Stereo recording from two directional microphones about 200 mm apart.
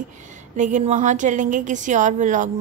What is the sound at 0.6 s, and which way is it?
A woman's voice, 40° right (ahead or behind).